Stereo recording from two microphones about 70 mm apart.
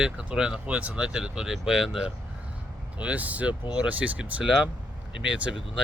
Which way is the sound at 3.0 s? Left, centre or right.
Centre.